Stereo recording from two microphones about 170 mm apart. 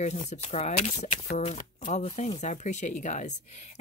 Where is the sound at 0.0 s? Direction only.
40° left (ahead or behind).